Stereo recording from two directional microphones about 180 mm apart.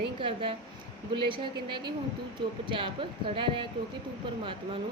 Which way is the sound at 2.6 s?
30° right (ahead or behind).